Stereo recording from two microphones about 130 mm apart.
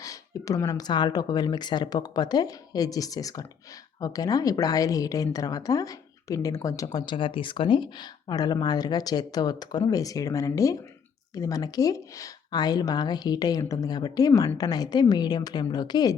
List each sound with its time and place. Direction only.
0.0 s a woman's voice: 25° left (ahead or behind)